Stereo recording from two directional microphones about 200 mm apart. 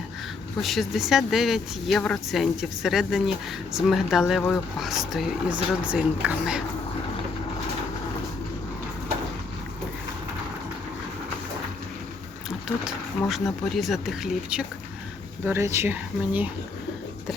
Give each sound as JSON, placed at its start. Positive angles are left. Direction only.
{"t": 0.6, "sound": "speech", "side_deg": 0}
{"t": 12.5, "sound": "a sound", "side_deg": 0}
{"t": 13.7, "sound": "speech", "side_deg": 0}